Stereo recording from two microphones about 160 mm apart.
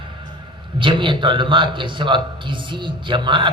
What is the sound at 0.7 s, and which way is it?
A man's voice, 30° right (ahead or behind).